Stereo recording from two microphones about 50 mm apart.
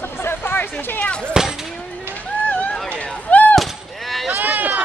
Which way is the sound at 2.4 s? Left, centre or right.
Left.